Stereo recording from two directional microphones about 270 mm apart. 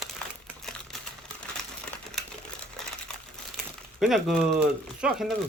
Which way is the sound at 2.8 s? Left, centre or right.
Centre.